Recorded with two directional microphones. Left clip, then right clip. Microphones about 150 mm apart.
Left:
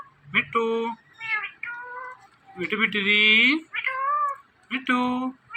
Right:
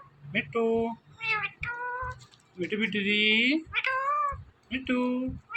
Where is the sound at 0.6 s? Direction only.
90° left.